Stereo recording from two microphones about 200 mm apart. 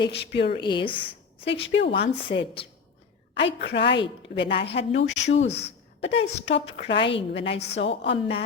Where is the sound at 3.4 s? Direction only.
60° left (ahead or behind).